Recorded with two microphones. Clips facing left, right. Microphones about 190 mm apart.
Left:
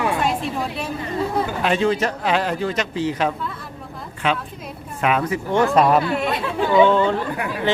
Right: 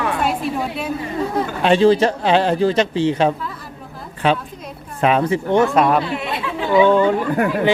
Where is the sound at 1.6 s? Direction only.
30° right (ahead or behind).